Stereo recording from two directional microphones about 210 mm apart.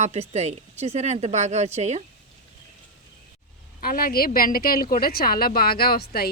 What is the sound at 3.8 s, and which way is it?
A woman's voice, 45° left (ahead or behind).